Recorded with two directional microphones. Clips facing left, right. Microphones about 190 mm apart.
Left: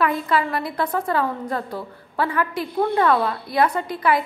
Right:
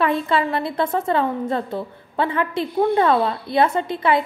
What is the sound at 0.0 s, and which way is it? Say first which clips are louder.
A woman's voice: right 1 dB; 25° right (ahead or behind).